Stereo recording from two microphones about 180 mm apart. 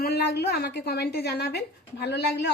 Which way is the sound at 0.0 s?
65° left (ahead or behind).